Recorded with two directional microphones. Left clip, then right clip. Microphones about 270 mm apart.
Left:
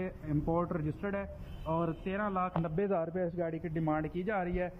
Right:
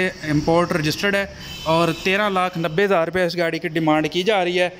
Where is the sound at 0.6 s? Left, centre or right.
Centre.